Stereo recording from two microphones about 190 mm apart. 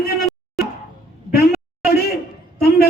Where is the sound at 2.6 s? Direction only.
55° left (ahead or behind).